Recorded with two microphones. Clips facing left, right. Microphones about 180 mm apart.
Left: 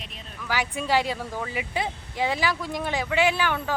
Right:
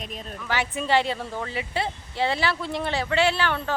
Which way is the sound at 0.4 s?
10° left (ahead or behind).